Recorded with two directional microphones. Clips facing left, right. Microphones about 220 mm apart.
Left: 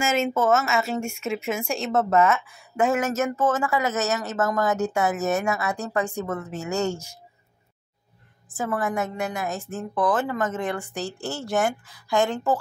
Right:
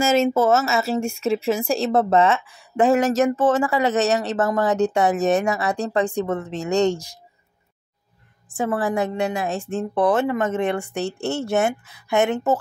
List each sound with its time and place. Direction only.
0.0 s speech: 35° right (ahead or behind)
8.5 s a woman's voice: 30° right (ahead or behind)